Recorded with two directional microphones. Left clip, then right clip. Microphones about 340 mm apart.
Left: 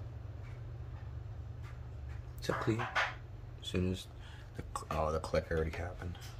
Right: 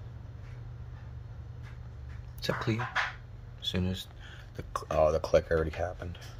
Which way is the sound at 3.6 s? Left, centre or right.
Centre.